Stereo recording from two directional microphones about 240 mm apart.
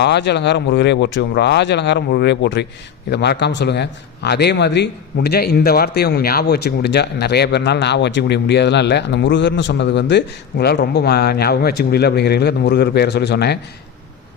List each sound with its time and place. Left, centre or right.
0.0 s a man's voice: left